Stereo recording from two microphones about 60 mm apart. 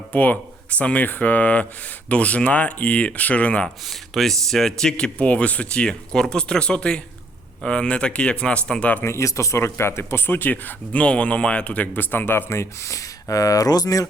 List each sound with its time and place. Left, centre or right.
0.1 s speech: left
3.8 s speech: centre
9.0 s speech: left